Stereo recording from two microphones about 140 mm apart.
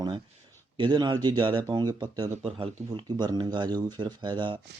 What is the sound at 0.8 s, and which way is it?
Speech, 30° right (ahead or behind).